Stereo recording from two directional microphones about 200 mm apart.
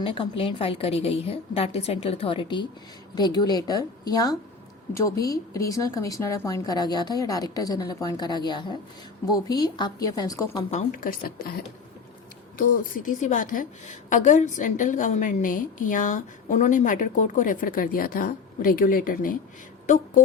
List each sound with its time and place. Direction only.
0.0 s a woman's voice: 25° left (ahead or behind)
10.7 s a woman's voice: 40° left (ahead or behind)